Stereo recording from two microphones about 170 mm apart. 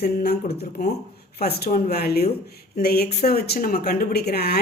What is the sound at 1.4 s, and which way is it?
Speech, 70° left (ahead or behind).